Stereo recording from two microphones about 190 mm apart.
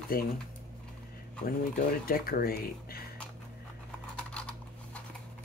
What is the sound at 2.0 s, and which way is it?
Speech, 50° left (ahead or behind).